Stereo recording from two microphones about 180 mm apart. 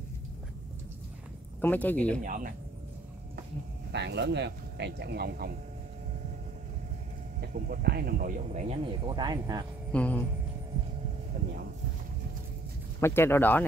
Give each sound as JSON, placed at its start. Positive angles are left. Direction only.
{"t": 1.6, "sound": "speech", "side_deg": 10}
{"t": 2.2, "sound": "speech", "side_deg": -50}
{"t": 3.9, "sound": "speech", "side_deg": -75}
{"t": 7.3, "sound": "speech", "side_deg": -50}
{"t": 9.9, "sound": "speech", "side_deg": 10}
{"t": 13.0, "sound": "speech", "side_deg": 15}